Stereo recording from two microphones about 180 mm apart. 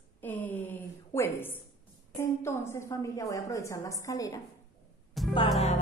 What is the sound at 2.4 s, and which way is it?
A woman's voice, 15° left (ahead or behind).